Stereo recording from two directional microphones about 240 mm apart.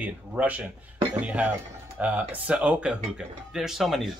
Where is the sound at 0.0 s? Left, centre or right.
Centre.